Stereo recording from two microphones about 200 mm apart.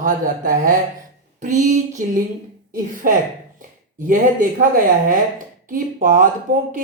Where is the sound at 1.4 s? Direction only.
40° right (ahead or behind).